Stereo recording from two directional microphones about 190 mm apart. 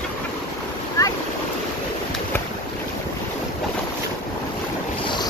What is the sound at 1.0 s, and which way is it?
Boat, 15° left (ahead or behind).